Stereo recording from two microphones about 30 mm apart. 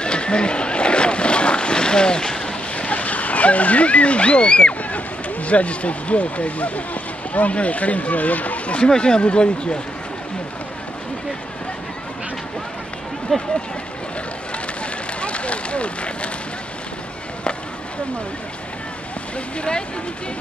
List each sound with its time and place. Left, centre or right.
0.0 s boat: left
2.7 s a sound: left
4.9 s speech: left
8.7 s speech: left
13.3 s speech: centre
15.1 s a sound: left